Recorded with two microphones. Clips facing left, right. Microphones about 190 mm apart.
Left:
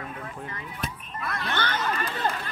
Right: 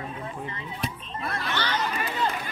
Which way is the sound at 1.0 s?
25° right (ahead or behind).